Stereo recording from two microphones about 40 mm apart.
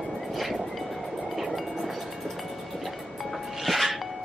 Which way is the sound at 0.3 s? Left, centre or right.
Centre.